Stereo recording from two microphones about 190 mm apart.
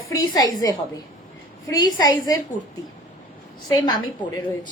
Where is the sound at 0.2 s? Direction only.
20° left (ahead or behind).